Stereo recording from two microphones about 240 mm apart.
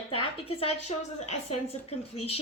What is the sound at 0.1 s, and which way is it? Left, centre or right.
A woman's voice, left.